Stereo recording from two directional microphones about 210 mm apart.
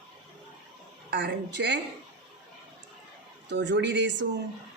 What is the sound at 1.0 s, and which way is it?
Speech, 55° right (ahead or behind).